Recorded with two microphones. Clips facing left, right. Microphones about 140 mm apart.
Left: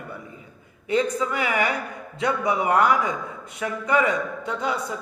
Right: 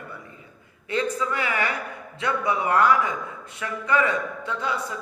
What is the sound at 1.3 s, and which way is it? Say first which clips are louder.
A man's voice: left 2 dB; 15° left (ahead or behind).